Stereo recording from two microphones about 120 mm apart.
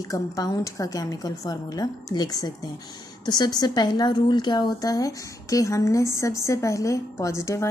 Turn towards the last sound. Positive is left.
turn(degrees=25)  # may be behind; listen again after turning